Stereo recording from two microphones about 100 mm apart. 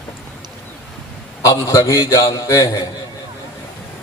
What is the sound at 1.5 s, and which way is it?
A man's voice, 35° left (ahead or behind).